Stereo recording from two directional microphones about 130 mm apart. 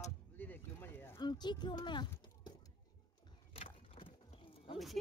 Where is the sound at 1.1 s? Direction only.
35° left (ahead or behind).